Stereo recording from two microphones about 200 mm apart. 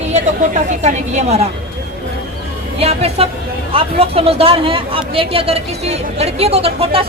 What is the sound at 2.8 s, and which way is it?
A woman's voice, 30° right (ahead or behind).